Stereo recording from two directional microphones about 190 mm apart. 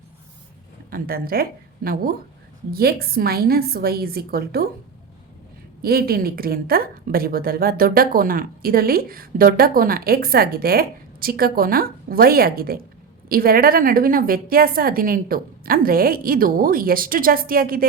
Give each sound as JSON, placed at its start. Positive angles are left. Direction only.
{"t": 0.9, "sound": "a woman's voice", "side_deg": -50}
{"t": 5.8, "sound": "a woman's voice", "side_deg": -55}